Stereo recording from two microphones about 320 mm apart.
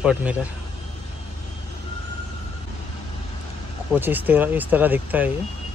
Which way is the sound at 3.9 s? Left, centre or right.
Centre.